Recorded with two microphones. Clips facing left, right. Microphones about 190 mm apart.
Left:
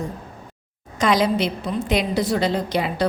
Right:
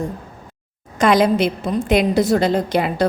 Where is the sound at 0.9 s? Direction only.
55° right (ahead or behind).